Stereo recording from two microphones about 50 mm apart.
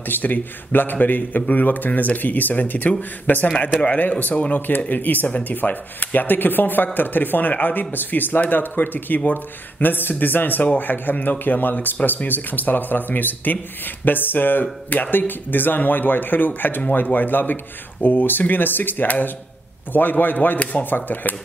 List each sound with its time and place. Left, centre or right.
0.1 s speech: left
3.8 s speech: left